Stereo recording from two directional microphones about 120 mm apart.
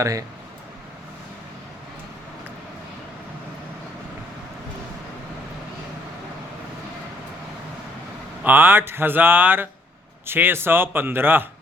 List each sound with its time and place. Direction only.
0.0 s speech: 30° right (ahead or behind)
8.4 s speech: 15° right (ahead or behind)